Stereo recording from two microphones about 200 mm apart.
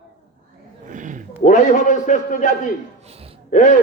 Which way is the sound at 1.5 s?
35° left (ahead or behind).